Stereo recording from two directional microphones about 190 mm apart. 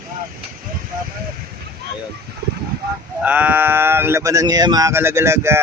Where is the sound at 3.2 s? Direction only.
10° right (ahead or behind).